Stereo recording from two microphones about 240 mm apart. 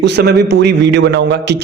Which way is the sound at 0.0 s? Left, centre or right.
Right.